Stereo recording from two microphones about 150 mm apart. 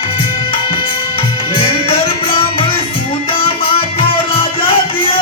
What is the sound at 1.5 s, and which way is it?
Music, 35° left (ahead or behind).